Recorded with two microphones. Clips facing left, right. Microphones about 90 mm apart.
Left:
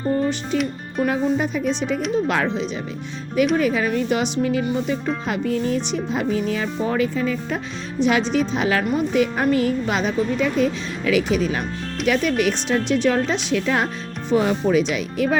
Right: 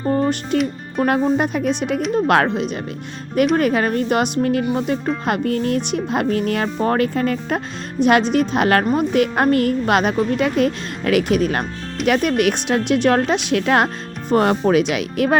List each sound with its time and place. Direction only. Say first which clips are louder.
1.4 s speech: right 3 dB; 60° right (ahead or behind)
3.5 s speech: right 2 dB; 55° right (ahead or behind)
14.7 s speech: right 2 dB; 65° right (ahead or behind)